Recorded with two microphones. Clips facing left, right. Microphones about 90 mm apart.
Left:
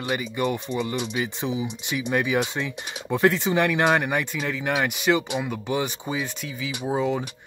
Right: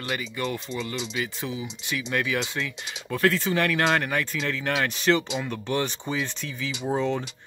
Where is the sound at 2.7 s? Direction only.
50° left (ahead or behind).